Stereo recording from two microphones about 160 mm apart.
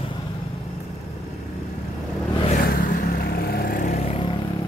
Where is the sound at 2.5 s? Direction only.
60° left (ahead or behind).